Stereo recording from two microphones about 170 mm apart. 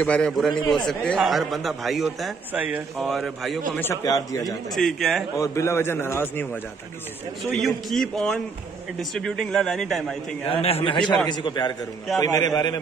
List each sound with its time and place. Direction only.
0.0 s a man's voice: 5° left (ahead or behind)
3.9 s a man's voice: 20° left (ahead or behind)
4.7 s a man's voice: centre (ahead or behind)
5.4 s a man's voice: 15° left (ahead or behind)
7.4 s a man's voice: centre (ahead or behind)
10.5 s a man's voice: 35° left (ahead or behind)